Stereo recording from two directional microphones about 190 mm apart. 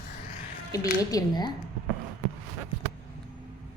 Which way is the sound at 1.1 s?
20° left (ahead or behind).